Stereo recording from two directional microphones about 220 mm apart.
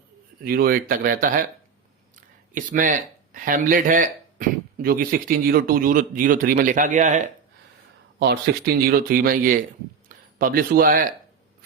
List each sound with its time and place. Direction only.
0.4 s speech: 45° right (ahead or behind)
8.2 s speech: 45° right (ahead or behind)